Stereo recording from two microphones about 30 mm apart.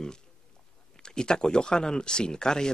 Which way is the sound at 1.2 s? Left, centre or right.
Left.